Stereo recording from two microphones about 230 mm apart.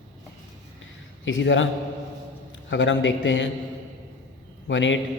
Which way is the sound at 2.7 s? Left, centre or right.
Left.